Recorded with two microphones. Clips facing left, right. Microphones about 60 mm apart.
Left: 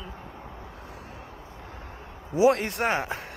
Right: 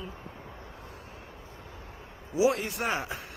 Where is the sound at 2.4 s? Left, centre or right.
Left.